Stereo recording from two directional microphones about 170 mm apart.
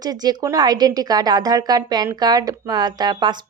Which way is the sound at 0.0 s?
25° right (ahead or behind).